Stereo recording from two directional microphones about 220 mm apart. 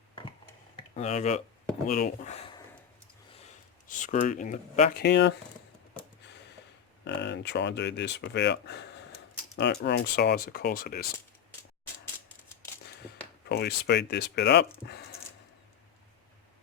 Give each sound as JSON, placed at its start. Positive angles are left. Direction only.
{"t": 0.8, "sound": "speech", "side_deg": 30}
{"t": 3.8, "sound": "speech", "side_deg": 35}
{"t": 7.0, "sound": "speech", "side_deg": 50}
{"t": 13.5, "sound": "speech", "side_deg": 45}